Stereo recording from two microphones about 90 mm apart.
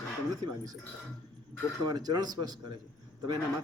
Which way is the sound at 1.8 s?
45° right (ahead or behind).